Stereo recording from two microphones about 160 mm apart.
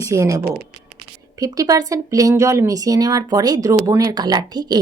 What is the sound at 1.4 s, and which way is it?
Speech, 20° right (ahead or behind).